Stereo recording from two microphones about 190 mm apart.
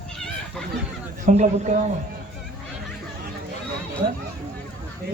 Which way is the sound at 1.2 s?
40° right (ahead or behind).